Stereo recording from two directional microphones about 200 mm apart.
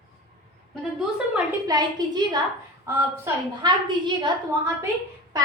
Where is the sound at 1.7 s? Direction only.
20° right (ahead or behind).